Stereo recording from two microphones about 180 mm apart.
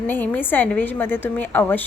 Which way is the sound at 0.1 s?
10° left (ahead or behind).